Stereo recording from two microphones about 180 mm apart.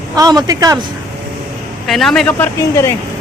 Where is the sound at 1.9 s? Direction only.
Centre (ahead or behind).